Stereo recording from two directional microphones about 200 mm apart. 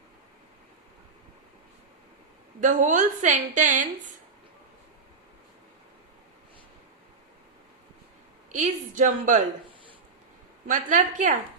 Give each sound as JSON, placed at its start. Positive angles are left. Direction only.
{"t": 2.6, "sound": "a woman's voice", "side_deg": -40}
{"t": 8.5, "sound": "a woman's voice", "side_deg": -40}
{"t": 10.7, "sound": "a woman's voice", "side_deg": -40}